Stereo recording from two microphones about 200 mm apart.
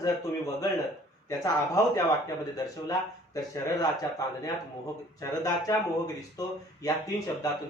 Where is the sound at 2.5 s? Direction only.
15° left (ahead or behind).